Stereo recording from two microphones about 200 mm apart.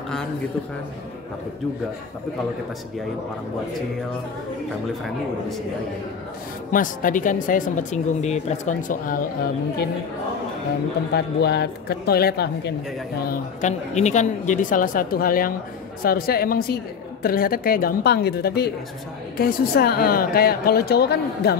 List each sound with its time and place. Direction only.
6.7 s speech: 40° left (ahead or behind)
11.1 s speech: 55° left (ahead or behind)
13.2 s a woman's voice: 40° left (ahead or behind)